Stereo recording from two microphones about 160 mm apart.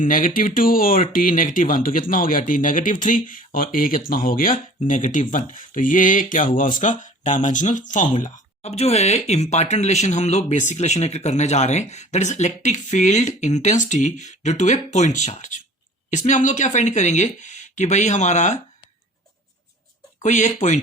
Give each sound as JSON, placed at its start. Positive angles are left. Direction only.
{"t": 0.0, "sound": "speech", "side_deg": 55}
{"t": 8.2, "sound": "speech", "side_deg": 40}
{"t": 20.2, "sound": "speech", "side_deg": 50}